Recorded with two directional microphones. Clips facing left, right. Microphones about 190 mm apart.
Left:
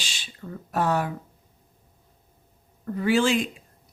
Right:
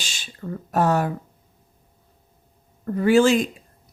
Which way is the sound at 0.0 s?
45° right (ahead or behind).